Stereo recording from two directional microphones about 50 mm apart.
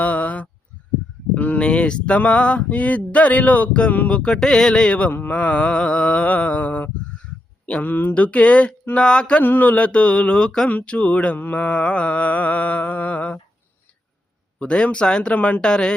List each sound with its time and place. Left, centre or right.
0.0 s a sound: left
1.3 s speech: left
3.9 s mantra: left
4.2 s a sound: centre
4.9 s speech: left
5.3 s mantra: left
7.7 s speech: left
9.4 s mantra: left
9.7 s speech: left
10.7 s speech: left
11.3 s mantra: left
14.6 s speech: left
15.3 s speech: left
15.6 s a sound: centre